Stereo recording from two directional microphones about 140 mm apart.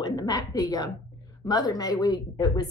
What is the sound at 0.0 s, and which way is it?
A woman's voice, 30° left (ahead or behind).